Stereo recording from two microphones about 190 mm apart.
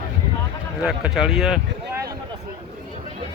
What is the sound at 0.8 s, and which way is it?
Speech, 5° right (ahead or behind).